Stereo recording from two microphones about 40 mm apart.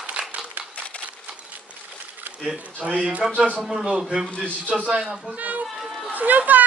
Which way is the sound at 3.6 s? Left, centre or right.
Centre.